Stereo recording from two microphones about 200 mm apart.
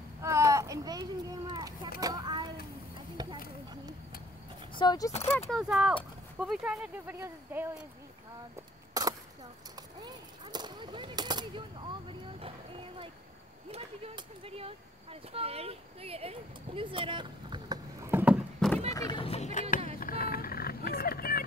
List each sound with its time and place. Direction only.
0.2 s a sound: 15° right (ahead or behind)
4.7 s speech: 20° left (ahead or behind)
5.5 s speech: centre (ahead or behind)
9.0 s chop: 15° right (ahead or behind)
9.8 s gunshot: 20° right (ahead or behind)
13.7 s speech: 30° right (ahead or behind); by 18.7 s 5° right (ahead or behind)
18.9 s a sound: 20° left (ahead or behind)
20.0 s vehicle: 45° left (ahead or behind)